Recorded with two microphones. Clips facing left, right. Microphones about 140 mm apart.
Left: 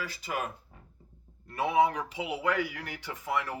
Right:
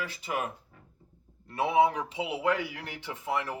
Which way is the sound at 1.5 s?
25° right (ahead or behind).